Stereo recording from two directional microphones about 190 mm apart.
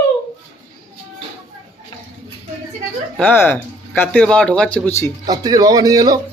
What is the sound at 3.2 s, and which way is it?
Speech, 10° left (ahead or behind).